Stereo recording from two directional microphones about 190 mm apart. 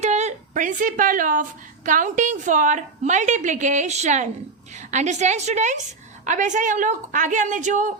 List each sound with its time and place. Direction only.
0.0 s a woman's voice: 35° right (ahead or behind)